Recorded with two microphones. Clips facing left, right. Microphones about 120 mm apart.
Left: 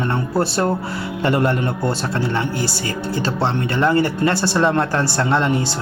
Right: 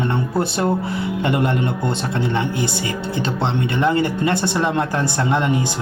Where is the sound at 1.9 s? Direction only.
20° right (ahead or behind).